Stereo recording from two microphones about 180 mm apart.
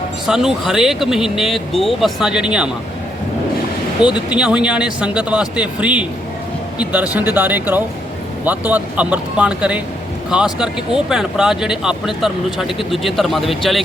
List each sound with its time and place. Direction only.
0.3 s speech: centre (ahead or behind)
4.3 s speech: 5° right (ahead or behind)